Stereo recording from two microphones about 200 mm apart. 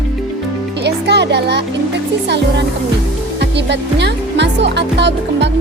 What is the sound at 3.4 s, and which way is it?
Speech, 60° right (ahead or behind).